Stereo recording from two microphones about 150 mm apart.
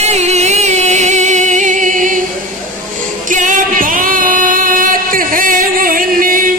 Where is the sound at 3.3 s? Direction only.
60° right (ahead or behind).